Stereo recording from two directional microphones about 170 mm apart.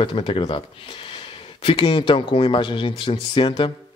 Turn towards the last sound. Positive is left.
turn(degrees=30)  # may be behind; listen again after turning